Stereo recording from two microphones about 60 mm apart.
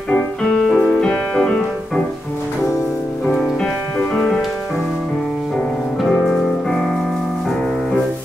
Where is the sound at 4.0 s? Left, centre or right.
Left.